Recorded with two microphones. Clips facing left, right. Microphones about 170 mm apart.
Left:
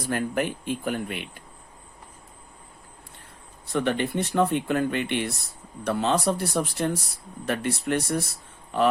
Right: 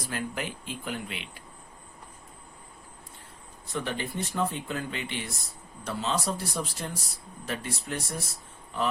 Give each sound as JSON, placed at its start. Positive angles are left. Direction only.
{"t": 0.1, "sound": "speech", "side_deg": 55}
{"t": 3.7, "sound": "speech", "side_deg": 65}